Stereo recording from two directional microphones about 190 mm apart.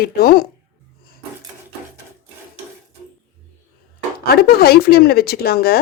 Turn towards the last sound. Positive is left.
turn(degrees=55)  # may be behind; listen again after turning